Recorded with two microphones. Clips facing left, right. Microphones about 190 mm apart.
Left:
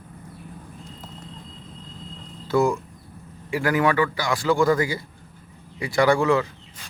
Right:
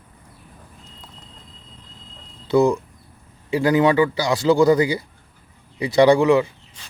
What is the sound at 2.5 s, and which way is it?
A man's voice, 20° right (ahead or behind).